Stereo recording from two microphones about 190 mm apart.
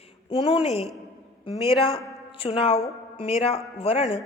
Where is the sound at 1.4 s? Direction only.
30° left (ahead or behind).